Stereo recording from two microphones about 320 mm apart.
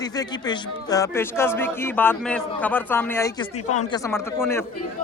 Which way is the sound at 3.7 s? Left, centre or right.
Left.